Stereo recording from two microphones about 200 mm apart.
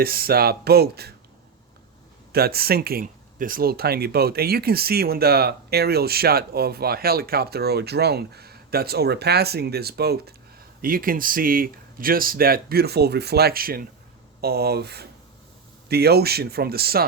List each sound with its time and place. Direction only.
0.0 s speech: 50° right (ahead or behind)
2.3 s speech: 50° right (ahead or behind)